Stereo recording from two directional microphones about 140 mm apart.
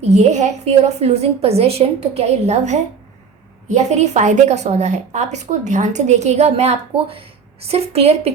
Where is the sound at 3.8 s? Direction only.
55° right (ahead or behind).